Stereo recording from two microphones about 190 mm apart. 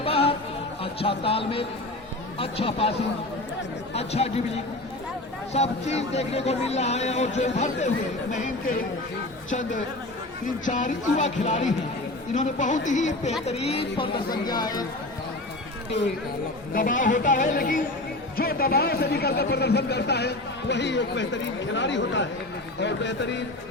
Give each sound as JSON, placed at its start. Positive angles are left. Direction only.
{"t": 0.0, "sound": "music", "side_deg": 30}
{"t": 0.8, "sound": "speech", "side_deg": 30}
{"t": 3.9, "sound": "speech", "side_deg": 35}
{"t": 9.5, "sound": "a woman's voice", "side_deg": 40}
{"t": 16.7, "sound": "a woman's voice", "side_deg": 45}